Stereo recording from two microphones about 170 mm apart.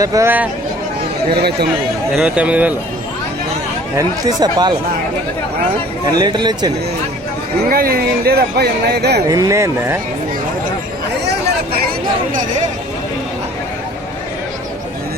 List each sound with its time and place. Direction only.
0.0 s speech: 20° right (ahead or behind)
1.3 s speech: 65° right (ahead or behind)
2.1 s speech: 5° right (ahead or behind)
3.9 s speech: 25° right (ahead or behind)
6.1 s speech: 25° right (ahead or behind)
7.7 s speech: 60° right (ahead or behind)
9.3 s speech: 20° right (ahead or behind)